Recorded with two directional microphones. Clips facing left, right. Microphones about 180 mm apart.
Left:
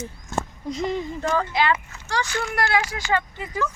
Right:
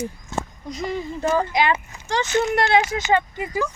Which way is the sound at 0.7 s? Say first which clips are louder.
Left 4 dB; 25° left (ahead or behind).